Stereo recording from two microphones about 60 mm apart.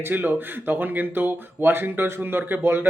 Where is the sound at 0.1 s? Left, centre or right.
Right.